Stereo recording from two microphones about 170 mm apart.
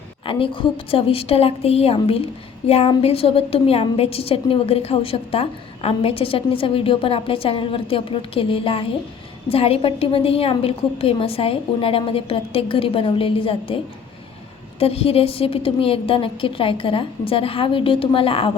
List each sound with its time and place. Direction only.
0.3 s a woman's voice: 30° left (ahead or behind)
14.8 s a woman's voice: 35° left (ahead or behind)